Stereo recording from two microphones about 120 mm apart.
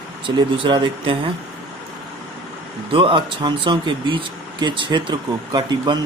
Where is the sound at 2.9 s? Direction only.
50° right (ahead or behind).